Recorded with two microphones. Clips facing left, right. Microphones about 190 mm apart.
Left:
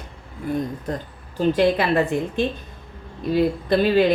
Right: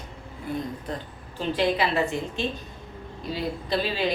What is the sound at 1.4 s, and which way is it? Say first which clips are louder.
A woman's voice: left 6 dB; 50° left (ahead or behind).